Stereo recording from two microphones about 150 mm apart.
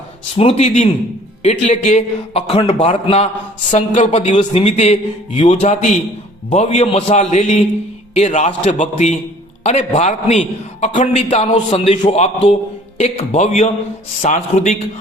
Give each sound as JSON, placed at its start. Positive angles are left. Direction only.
{"t": 0.3, "sound": "speech", "side_deg": 45}
{"t": 11.7, "sound": "a man's voice", "side_deg": 35}
{"t": 12.1, "sound": "speech", "side_deg": 45}